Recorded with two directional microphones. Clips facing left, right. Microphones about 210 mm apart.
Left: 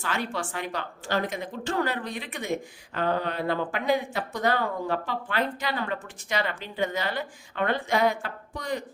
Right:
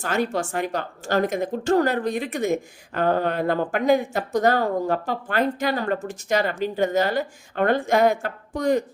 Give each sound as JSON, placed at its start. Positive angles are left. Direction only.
{"t": 0.0, "sound": "a woman's voice", "side_deg": -45}